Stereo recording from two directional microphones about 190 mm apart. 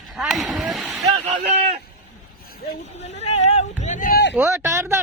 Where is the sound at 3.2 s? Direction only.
35° left (ahead or behind).